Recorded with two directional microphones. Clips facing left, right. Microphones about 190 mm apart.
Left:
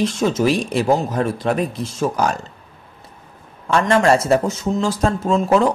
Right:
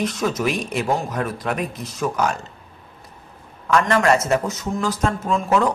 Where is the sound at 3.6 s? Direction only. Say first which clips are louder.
Left 2 dB; 25° left (ahead or behind).